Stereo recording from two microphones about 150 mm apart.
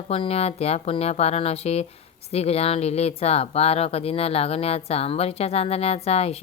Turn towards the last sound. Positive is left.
turn(degrees=40)  # may be behind; listen again after turning